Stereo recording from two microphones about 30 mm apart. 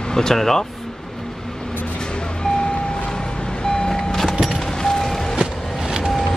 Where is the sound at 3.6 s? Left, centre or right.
Left.